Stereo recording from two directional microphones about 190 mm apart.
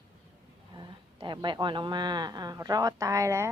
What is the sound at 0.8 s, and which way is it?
A woman's voice, 25° right (ahead or behind).